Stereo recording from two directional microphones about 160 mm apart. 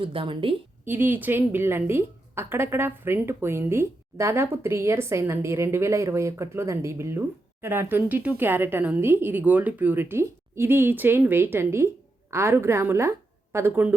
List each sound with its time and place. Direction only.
0.0 s a woman's voice: 35° right (ahead or behind)
0.9 s a woman's voice: 10° right (ahead or behind)